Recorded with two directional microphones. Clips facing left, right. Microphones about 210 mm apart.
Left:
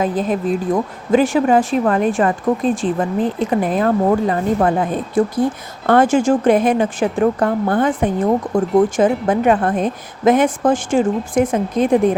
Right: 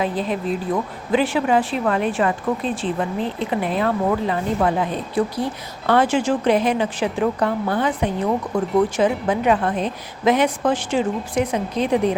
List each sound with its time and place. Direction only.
0.0 s speech: 45° left (ahead or behind)